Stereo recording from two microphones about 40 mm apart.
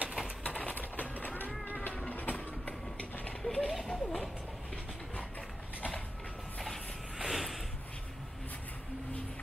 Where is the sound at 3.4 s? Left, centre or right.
Centre.